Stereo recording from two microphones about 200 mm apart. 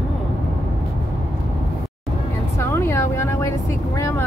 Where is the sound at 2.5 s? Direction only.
10° left (ahead or behind).